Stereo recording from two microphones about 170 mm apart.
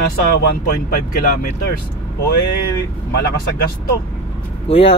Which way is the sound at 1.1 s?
60° left (ahead or behind).